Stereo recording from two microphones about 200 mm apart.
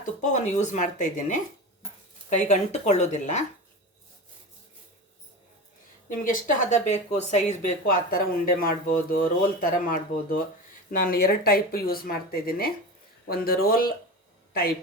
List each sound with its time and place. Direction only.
0.0 s speech: 40° left (ahead or behind)
6.1 s speech: 40° left (ahead or behind)